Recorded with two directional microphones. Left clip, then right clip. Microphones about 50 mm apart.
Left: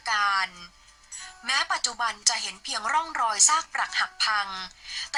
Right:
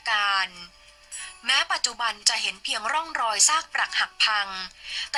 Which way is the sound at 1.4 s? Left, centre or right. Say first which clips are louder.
Right 2 dB; right.